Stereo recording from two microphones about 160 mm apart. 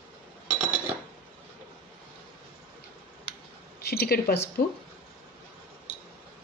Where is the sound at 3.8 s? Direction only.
80° left.